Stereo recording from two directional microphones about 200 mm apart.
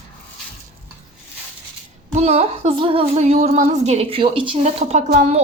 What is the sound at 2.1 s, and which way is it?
A woman's voice, 30° right (ahead or behind).